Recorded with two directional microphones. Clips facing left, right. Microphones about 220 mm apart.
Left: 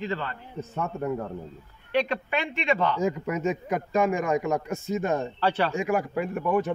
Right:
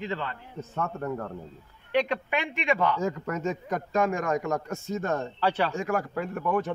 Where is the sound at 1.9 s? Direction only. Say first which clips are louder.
Even; 15° right (ahead or behind).